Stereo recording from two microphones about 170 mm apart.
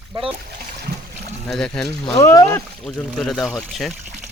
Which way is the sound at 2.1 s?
20° left (ahead or behind).